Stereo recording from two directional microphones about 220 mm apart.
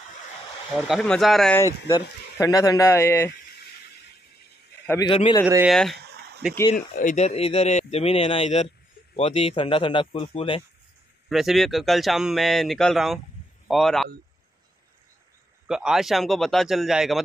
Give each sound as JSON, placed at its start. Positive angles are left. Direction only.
{"t": 0.7, "sound": "speech", "side_deg": 0}
{"t": 2.4, "sound": "speech", "side_deg": 15}
{"t": 4.8, "sound": "a man's voice", "side_deg": 15}
{"t": 5.7, "sound": "speech", "side_deg": 0}
{"t": 5.9, "sound": "a sound", "side_deg": -50}
{"t": 6.7, "sound": "speech", "side_deg": 35}
{"t": 11.2, "sound": "speech", "side_deg": 0}
{"t": 15.6, "sound": "speech", "side_deg": -5}